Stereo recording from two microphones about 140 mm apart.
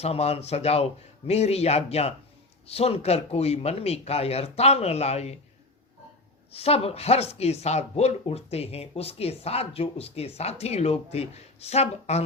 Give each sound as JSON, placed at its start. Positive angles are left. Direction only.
{"t": 0.0, "sound": "speech", "side_deg": 50}
{"t": 6.5, "sound": "speech", "side_deg": 45}